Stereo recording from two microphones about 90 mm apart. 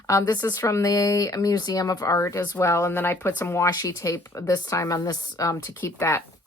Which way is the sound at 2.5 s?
30° left (ahead or behind).